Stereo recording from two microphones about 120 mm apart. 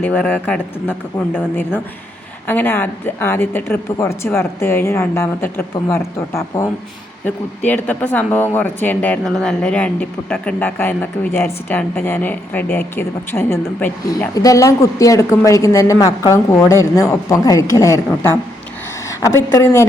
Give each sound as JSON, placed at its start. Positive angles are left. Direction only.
{"t": 0.0, "sound": "speech", "side_deg": 10}
{"t": 0.9, "sound": "speech", "side_deg": -10}
{"t": 2.5, "sound": "speech", "side_deg": 15}
{"t": 9.2, "sound": "speech", "side_deg": 5}
{"t": 14.1, "sound": "speech", "side_deg": 30}